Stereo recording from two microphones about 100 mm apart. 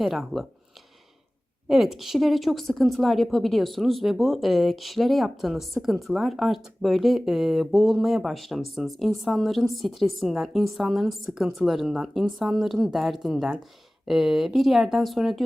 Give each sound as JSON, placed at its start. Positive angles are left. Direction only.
{"t": 0.0, "sound": "speech", "side_deg": 0}
{"t": 1.6, "sound": "speech", "side_deg": 0}